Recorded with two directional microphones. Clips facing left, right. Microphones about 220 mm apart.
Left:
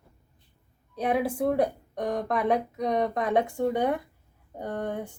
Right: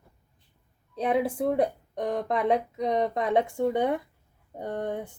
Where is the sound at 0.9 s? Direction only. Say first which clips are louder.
Right 1 dB; 25° right (ahead or behind).